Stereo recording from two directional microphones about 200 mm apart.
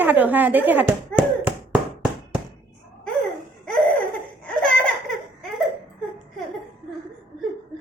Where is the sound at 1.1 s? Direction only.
5° right (ahead or behind).